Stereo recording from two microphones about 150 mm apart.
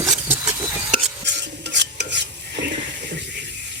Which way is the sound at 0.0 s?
25° right (ahead or behind).